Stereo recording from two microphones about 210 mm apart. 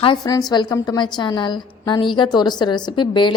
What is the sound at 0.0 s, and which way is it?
A woman's voice, 20° left (ahead or behind).